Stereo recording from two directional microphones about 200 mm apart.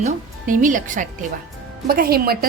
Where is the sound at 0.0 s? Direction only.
40° right (ahead or behind).